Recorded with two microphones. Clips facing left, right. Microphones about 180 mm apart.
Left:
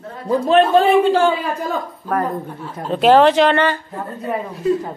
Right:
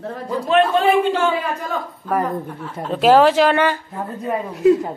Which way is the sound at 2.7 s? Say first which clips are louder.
Left 1 dB; 5° right (ahead or behind).